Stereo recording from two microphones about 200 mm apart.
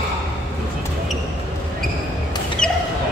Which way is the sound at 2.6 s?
5° left (ahead or behind).